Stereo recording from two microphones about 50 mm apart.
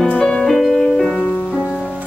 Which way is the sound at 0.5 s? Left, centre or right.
Centre.